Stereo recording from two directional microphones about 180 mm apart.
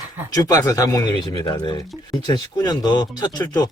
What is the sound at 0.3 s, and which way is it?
Speech, 20° left (ahead or behind).